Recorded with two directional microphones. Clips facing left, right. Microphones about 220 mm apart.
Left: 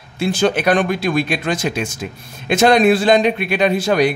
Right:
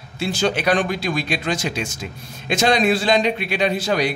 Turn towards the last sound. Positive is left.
turn(degrees=50)  # may be behind; listen again after turning